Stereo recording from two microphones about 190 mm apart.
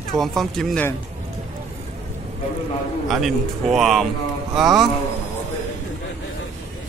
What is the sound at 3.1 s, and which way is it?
Speech, centre (ahead or behind).